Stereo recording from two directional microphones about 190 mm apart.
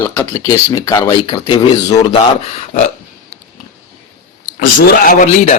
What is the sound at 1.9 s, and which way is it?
Speech, 35° left (ahead or behind).